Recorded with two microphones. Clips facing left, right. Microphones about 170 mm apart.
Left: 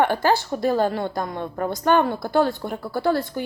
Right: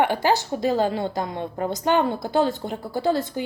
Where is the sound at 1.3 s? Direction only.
20° right (ahead or behind).